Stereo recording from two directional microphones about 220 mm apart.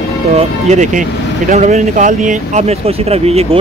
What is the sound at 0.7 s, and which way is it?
Speech, 35° right (ahead or behind).